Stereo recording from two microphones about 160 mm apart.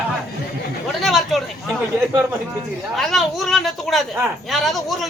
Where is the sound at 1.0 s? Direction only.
Centre (ahead or behind).